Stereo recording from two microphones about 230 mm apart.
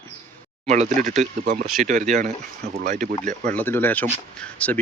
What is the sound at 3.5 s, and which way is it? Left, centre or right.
Speech, centre.